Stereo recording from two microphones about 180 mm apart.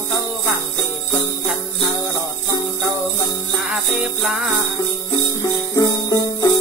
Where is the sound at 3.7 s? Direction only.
Centre (ahead or behind).